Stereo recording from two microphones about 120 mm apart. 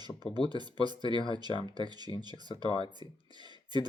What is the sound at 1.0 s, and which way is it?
Speech, 40° left (ahead or behind).